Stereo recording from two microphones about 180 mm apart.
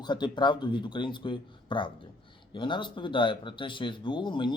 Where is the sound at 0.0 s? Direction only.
25° left (ahead or behind).